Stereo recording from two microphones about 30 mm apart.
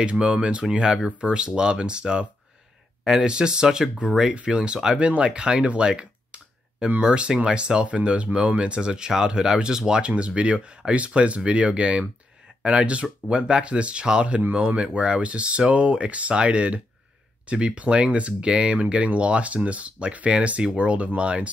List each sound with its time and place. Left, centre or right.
0.0 s speech: right
3.3 s speech: right
5.8 s clicking: right
7.0 s speech: right
7.8 s speech: right
10.0 s speech: right